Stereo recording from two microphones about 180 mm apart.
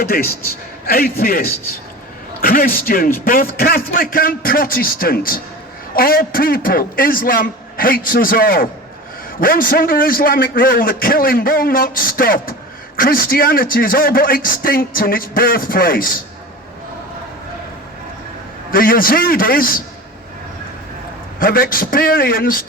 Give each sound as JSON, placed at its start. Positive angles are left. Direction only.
{"t": 0.0, "sound": "a man's voice", "side_deg": 55}
{"t": 18.7, "sound": "a man's voice", "side_deg": 50}
{"t": 21.3, "sound": "a man's voice", "side_deg": 50}